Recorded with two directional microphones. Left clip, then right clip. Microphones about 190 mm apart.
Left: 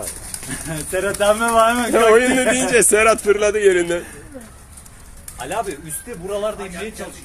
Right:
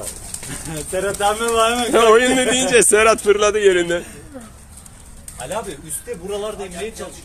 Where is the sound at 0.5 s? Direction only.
45° left (ahead or behind).